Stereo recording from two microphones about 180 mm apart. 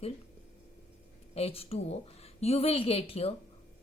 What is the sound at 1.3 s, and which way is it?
A woman's voice, 30° left (ahead or behind).